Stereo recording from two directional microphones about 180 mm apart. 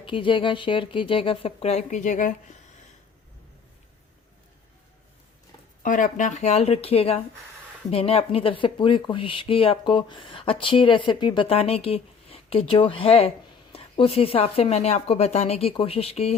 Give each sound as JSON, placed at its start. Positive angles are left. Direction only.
{"t": 0.0, "sound": "speech", "side_deg": 30}
{"t": 5.8, "sound": "speech", "side_deg": 45}